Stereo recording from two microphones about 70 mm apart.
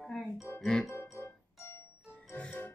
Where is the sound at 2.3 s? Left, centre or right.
Centre.